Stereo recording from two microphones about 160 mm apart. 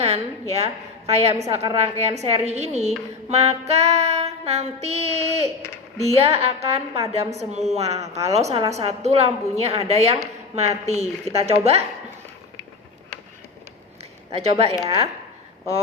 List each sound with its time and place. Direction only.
0.0 s a woman's voice: 40° right (ahead or behind)
14.3 s a woman's voice: 40° right (ahead or behind)